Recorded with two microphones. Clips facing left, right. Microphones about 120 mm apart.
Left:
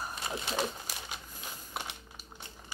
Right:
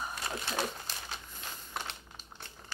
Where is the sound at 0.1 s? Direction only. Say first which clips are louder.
Left 1 dB; 20° left (ahead or behind).